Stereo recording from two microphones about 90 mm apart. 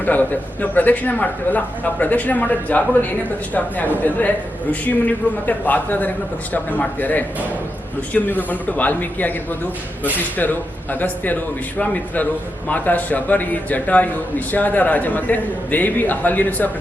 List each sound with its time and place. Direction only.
0.0 s a man's voice: 20° left (ahead or behind)
10.3 s a man's voice: 20° left (ahead or behind)
11.8 s a man's voice: 15° left (ahead or behind)